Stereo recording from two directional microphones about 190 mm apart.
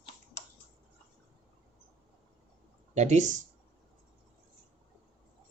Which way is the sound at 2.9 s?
40° right (ahead or behind).